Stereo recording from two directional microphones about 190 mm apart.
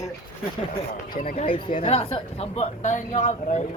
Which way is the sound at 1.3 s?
30° left (ahead or behind).